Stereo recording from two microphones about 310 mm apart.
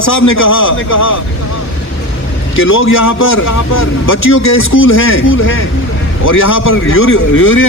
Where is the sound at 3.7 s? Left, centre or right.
Left.